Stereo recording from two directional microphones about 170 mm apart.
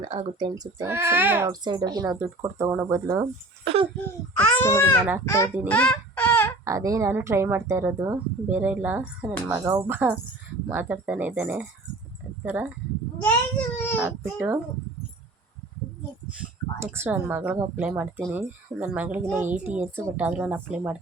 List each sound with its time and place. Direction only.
0.0 s speech: 30° right (ahead or behind); by 1.5 s 10° right (ahead or behind)
1.5 s speech: 25° right (ahead or behind)
3.6 s speech: 35° right (ahead or behind)
3.9 s a child's voice: 10° left (ahead or behind)
6.7 s speech: 20° right (ahead or behind)
13.2 s a child's voice: 10° left (ahead or behind)
14.0 s speech: 10° right (ahead or behind)
16.8 s speech: 15° right (ahead or behind)